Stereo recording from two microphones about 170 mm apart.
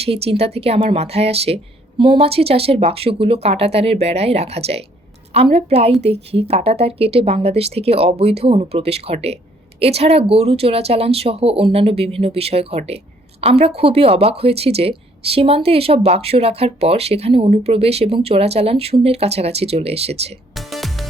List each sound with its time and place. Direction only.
0.0 s speech: 35° right (ahead or behind)
20.6 s music: centre (ahead or behind)